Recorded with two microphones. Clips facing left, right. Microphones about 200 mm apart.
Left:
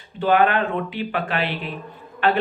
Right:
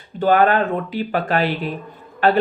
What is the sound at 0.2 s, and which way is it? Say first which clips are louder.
Speech: right 3 dB; 40° right (ahead or behind).